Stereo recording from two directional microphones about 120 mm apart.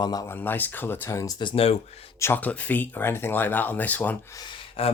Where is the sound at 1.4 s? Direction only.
45° left (ahead or behind).